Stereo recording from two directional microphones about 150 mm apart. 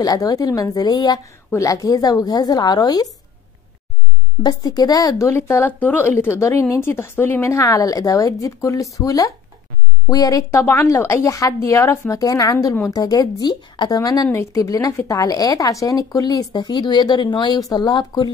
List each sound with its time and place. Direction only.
0.0 s a woman's voice: 25° left (ahead or behind)
4.4 s a woman's voice: 25° left (ahead or behind)